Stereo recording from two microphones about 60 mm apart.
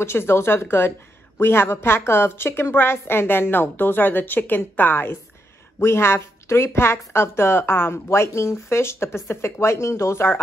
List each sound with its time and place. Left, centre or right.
0.0 s a woman's voice: left